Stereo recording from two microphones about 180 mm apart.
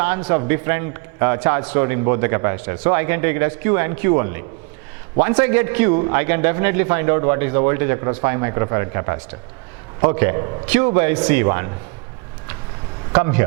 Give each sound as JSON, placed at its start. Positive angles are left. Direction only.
{"t": 0.0, "sound": "a man's voice", "side_deg": -15}
{"t": 13.1, "sound": "a man's voice", "side_deg": -15}